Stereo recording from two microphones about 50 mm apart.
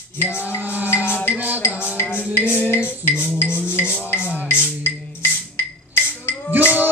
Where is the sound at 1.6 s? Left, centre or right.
Left.